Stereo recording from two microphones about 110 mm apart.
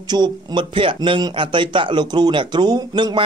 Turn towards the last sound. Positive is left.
turn(degrees=-45)  # may be behind; listen again after turning